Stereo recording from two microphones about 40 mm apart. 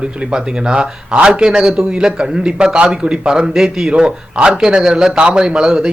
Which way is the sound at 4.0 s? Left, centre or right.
Right.